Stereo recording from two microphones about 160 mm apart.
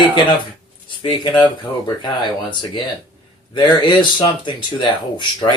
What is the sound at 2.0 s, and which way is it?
Speech, 30° left (ahead or behind).